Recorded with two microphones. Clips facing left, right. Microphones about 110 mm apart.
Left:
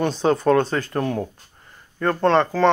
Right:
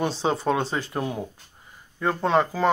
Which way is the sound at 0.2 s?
5° right (ahead or behind).